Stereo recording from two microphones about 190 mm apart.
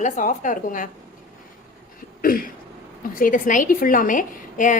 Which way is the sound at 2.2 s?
50° left (ahead or behind).